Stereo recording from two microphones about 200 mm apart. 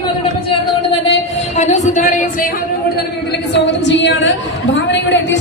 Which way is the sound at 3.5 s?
60° left (ahead or behind).